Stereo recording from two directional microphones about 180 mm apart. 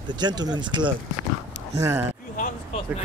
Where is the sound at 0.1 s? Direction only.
25° right (ahead or behind).